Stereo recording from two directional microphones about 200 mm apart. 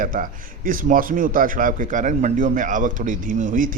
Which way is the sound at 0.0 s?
40° right (ahead or behind).